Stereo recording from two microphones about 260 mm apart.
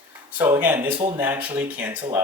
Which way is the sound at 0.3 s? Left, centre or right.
Centre.